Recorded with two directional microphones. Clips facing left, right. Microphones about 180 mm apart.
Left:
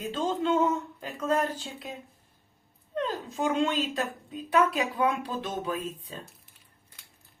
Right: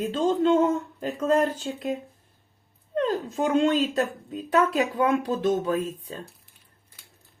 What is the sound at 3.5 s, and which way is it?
Speech, 45° right (ahead or behind).